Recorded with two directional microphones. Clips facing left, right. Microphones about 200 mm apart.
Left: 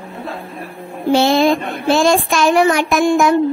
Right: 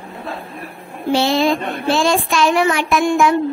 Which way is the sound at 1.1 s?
50° left (ahead or behind).